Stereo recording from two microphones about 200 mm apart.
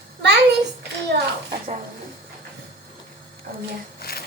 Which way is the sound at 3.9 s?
50° left (ahead or behind).